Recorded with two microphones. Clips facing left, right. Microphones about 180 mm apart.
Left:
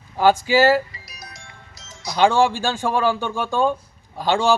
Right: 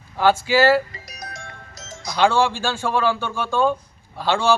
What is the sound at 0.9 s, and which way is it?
Music, 45° right (ahead or behind).